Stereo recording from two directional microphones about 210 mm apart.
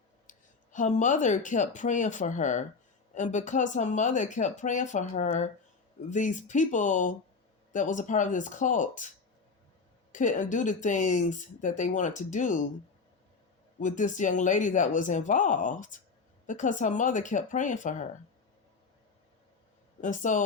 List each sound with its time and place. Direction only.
0.3 s speech: 35° left (ahead or behind)
13.7 s speech: 35° left (ahead or behind)
20.0 s speech: 35° left (ahead or behind)